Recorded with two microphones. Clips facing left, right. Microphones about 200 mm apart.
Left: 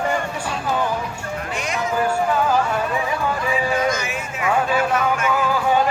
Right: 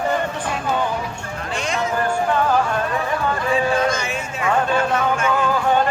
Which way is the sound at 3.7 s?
30° right (ahead or behind).